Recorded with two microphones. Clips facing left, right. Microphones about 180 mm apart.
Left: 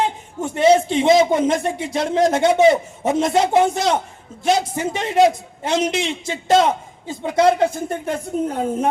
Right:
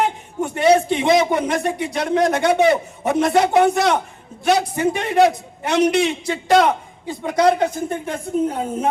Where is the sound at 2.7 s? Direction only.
60° right (ahead or behind).